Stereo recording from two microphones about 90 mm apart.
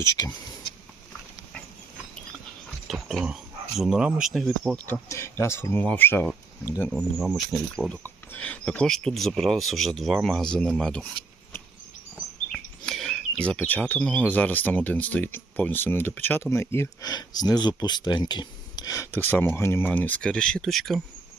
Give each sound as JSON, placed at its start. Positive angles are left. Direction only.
{"t": 0.2, "sound": "speech", "side_deg": 40}
{"t": 2.8, "sound": "speech", "side_deg": 0}
{"t": 5.0, "sound": "speech", "side_deg": 30}
{"t": 6.9, "sound": "speech", "side_deg": 5}
{"t": 8.0, "sound": "speech", "side_deg": 20}
{"t": 12.5, "sound": "a sound", "side_deg": 5}
{"t": 13.4, "sound": "speech", "side_deg": 15}
{"t": 17.0, "sound": "speech", "side_deg": 50}
{"t": 19.1, "sound": "speech", "side_deg": 20}